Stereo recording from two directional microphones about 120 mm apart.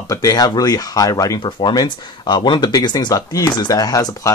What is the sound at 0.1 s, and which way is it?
Speech, 30° left (ahead or behind).